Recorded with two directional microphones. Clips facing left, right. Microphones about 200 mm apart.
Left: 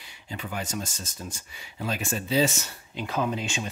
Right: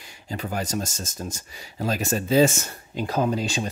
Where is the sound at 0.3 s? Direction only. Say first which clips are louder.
Right 5 dB; 40° right (ahead or behind).